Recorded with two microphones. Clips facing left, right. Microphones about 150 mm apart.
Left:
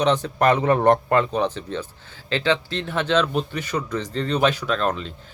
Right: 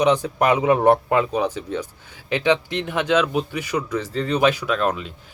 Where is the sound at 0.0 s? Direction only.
10° right (ahead or behind).